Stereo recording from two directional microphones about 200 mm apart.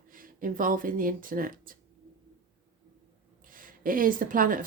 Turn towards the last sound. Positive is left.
turn(degrees=-45)  # may be behind; listen again after turning